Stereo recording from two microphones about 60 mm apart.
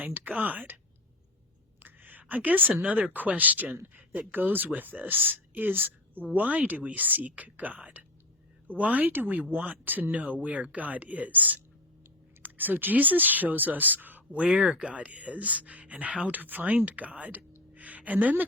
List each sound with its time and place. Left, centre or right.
0.0 s speech: right
1.8 s a woman's voice: right
14.3 s a woman's voice: centre